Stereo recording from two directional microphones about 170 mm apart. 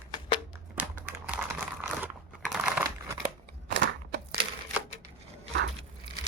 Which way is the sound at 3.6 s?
90° right.